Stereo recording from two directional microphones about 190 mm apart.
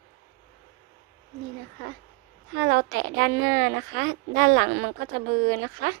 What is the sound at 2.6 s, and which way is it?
A woman's voice, 65° right (ahead or behind).